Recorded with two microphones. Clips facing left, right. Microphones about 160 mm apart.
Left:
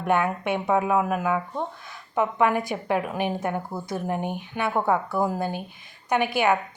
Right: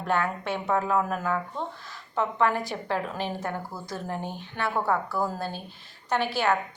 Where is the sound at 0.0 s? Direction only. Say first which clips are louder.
Left 4 dB; 15° left (ahead or behind).